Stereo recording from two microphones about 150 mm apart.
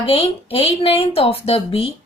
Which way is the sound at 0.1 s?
40° left (ahead or behind).